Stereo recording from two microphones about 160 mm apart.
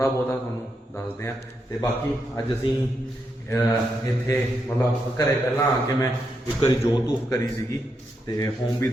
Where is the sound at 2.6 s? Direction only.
30° left (ahead or behind).